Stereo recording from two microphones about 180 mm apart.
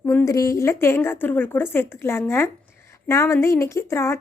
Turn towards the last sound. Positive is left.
turn(degrees=15)  # may be behind; listen again after turning